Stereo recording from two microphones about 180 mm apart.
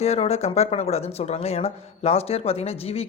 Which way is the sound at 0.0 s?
35° left (ahead or behind).